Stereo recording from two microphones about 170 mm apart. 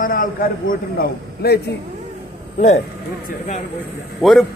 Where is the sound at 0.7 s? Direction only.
65° left (ahead or behind).